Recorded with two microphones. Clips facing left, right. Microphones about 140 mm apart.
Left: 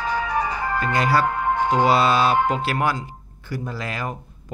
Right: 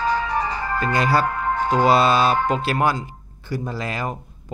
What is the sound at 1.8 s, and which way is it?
Speech, 30° right (ahead or behind).